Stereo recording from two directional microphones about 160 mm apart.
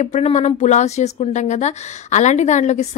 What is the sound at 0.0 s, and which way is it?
Speech, 45° left (ahead or behind).